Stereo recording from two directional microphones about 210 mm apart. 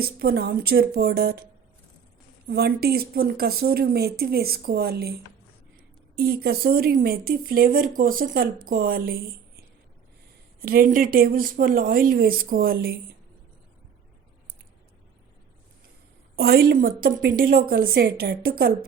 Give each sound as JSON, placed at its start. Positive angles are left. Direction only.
{"t": 0.0, "sound": "a woman's voice", "side_deg": -45}
{"t": 2.5, "sound": "a woman's voice", "side_deg": -50}
{"t": 10.6, "sound": "a woman's voice", "side_deg": -45}
{"t": 16.3, "sound": "a woman's voice", "side_deg": -45}